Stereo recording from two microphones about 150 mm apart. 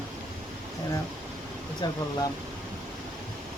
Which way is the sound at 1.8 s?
30° left (ahead or behind).